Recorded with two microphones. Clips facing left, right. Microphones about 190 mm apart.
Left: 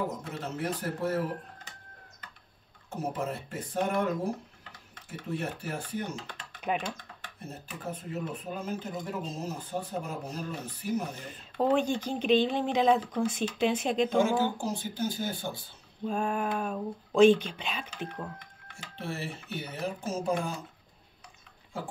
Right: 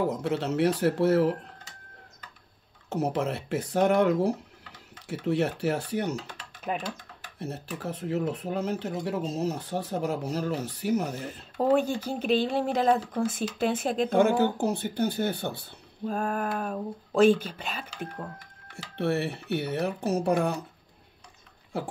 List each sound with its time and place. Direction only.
0.2 s speech: 80° right
2.9 s speech: 80° right
6.3 s typing: 5° right (ahead or behind)
7.3 s speech: 75° right (ahead or behind)
11.5 s speech: 5° right (ahead or behind)
14.1 s speech: 60° right (ahead or behind)
16.1 s speech: centre (ahead or behind)
18.9 s speech: 65° right (ahead or behind)
21.7 s speech: 70° right (ahead or behind)